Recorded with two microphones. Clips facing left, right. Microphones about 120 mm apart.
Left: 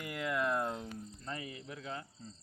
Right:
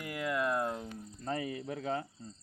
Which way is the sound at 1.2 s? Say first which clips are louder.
Right 10 dB; 40° right (ahead or behind).